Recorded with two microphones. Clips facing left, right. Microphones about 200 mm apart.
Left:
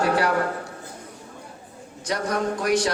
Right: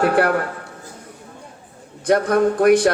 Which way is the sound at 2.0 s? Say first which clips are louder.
Right 9 dB; 55° right (ahead or behind).